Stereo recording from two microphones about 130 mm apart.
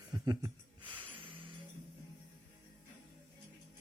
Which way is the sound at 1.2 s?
40° right (ahead or behind).